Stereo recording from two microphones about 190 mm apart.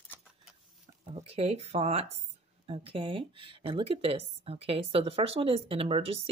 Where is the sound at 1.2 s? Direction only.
35° right (ahead or behind).